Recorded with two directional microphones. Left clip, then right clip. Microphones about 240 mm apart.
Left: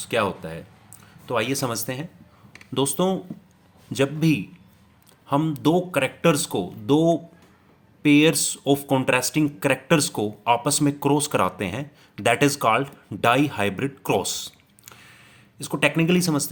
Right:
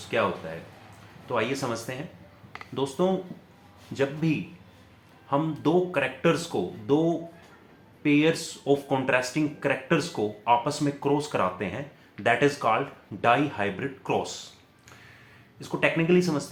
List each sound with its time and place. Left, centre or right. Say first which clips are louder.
0.1 s speech: left 3 dB; left
1.3 s speech: left 3 dB; left
15.5 s speech: left 3 dB; left